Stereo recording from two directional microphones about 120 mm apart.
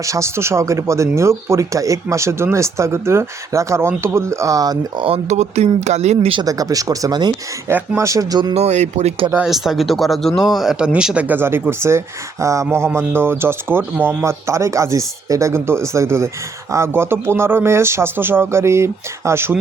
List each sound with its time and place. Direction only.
0.0 s speech: 25° right (ahead or behind)
5.0 s speech: 65° right (ahead or behind)
6.4 s speech: 30° right (ahead or behind)
8.5 s speech: 70° right (ahead or behind)
9.5 s speech: centre (ahead or behind); by 19.5 s 20° right (ahead or behind)